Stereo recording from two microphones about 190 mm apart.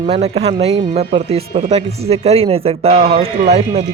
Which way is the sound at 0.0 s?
35° right (ahead or behind).